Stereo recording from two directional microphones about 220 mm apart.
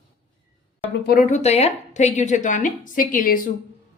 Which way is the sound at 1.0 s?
40° left (ahead or behind).